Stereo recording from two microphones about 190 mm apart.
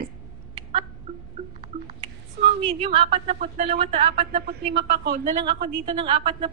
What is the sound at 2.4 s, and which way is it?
A woman's voice, 30° right (ahead or behind).